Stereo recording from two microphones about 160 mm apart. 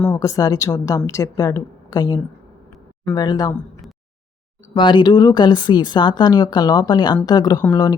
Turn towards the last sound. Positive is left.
turn(degrees=25)  # may be behind; listen again after turning